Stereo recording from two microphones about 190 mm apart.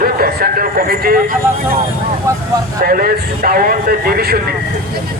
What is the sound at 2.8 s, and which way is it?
A man's voice, 50° right (ahead or behind).